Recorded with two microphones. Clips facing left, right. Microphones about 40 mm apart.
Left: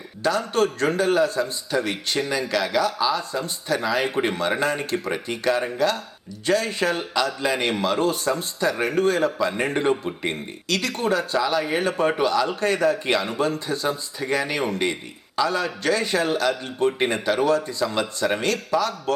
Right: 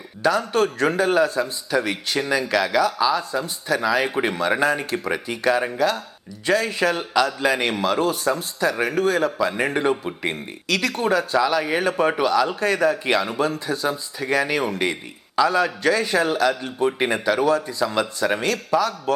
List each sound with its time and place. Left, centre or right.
0.5 s a man's voice: centre
0.9 s a man's voice: centre
5.1 s a man's voice: centre
6.7 s speech: centre
15.4 s a man's voice: centre
17.5 s a man's voice: centre
17.8 s speech: centre